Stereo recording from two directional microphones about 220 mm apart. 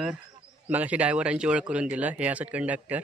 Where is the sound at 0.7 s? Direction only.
5° right (ahead or behind).